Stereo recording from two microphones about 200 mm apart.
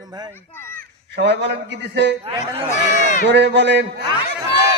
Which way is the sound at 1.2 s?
60° right (ahead or behind).